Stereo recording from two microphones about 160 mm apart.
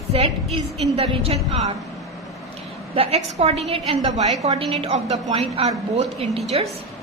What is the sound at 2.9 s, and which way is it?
A woman's voice, 40° right (ahead or behind).